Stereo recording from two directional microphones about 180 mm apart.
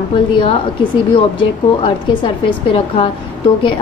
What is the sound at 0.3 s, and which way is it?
Speech, 30° left (ahead or behind).